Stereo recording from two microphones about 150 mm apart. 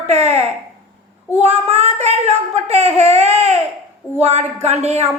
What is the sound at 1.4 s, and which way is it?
A child's voice, 45° right (ahead or behind).